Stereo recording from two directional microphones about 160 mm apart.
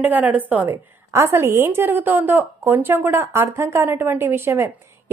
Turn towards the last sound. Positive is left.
turn(degrees=-15)  # may be behind; listen again after turning